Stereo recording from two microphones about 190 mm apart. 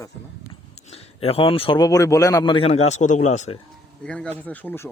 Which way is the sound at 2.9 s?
40° left (ahead or behind).